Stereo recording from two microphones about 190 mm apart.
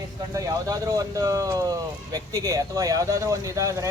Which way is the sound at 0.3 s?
20° right (ahead or behind).